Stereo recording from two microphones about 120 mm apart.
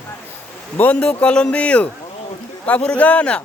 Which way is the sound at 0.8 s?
10° left (ahead or behind).